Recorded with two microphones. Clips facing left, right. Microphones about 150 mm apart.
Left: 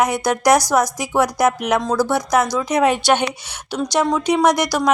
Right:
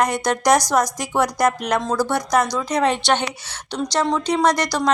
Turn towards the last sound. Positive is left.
turn(degrees=10)  # may be behind; listen again after turning